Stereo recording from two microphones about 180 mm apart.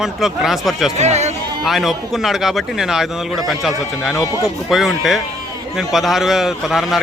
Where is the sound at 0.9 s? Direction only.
40° right (ahead or behind).